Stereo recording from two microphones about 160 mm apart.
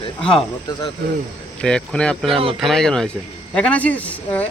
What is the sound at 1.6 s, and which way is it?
Speech, 5° left (ahead or behind).